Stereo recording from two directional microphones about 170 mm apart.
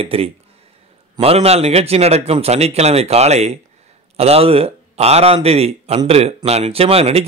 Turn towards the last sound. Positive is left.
turn(degrees=-35)  # may be behind; listen again after turning